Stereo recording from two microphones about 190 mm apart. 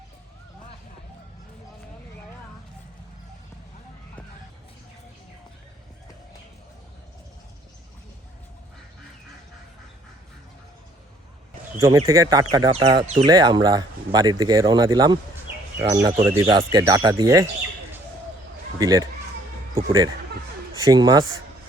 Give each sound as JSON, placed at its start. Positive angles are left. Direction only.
{"t": 11.8, "sound": "speech", "side_deg": -15}
{"t": 18.8, "sound": "speech", "side_deg": -20}